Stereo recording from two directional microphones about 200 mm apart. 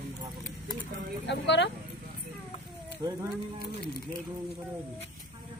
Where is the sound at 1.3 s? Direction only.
60° left (ahead or behind).